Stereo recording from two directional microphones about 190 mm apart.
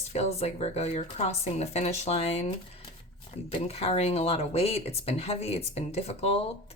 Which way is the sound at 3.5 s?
30° left (ahead or behind).